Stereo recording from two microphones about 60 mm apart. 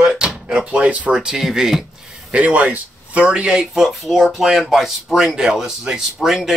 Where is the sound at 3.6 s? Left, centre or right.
Centre.